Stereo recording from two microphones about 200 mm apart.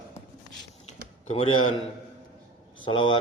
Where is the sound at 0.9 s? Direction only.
30° left (ahead or behind).